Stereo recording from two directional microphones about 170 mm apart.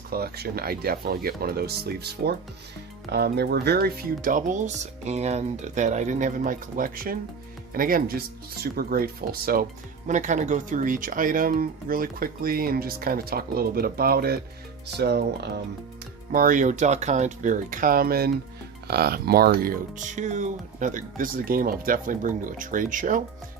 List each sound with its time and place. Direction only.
0.1 s speech: 65° right (ahead or behind)
10.1 s speech: 45° right (ahead or behind); by 14.3 s 65° right (ahead or behind)
14.9 s speech: 75° right (ahead or behind)
16.3 s speech: 55° right (ahead or behind)